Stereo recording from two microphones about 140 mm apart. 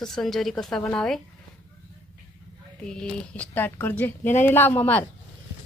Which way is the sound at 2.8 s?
5° left (ahead or behind).